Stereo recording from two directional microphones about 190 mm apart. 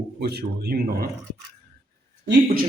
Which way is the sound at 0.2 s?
55° right (ahead or behind).